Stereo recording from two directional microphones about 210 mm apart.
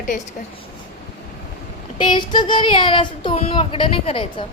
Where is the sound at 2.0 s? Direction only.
20° left (ahead or behind).